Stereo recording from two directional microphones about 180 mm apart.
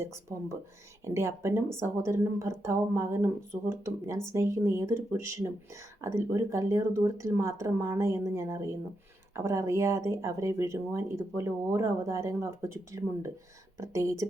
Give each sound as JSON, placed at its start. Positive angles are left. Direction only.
{"t": 0.0, "sound": "speech", "side_deg": -15}